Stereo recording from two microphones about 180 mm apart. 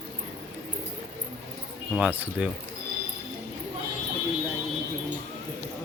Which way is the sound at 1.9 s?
5° right (ahead or behind).